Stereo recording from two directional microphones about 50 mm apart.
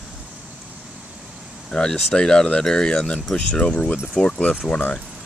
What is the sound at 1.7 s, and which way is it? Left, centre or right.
Speech, centre.